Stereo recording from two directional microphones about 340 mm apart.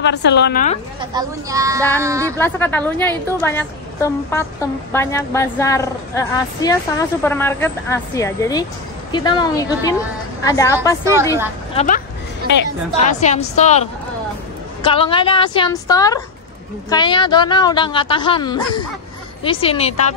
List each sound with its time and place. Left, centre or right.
0.0 s a woman's voice: left
1.1 s speech: centre
2.3 s a woman's voice: centre
11.7 s a woman's voice: left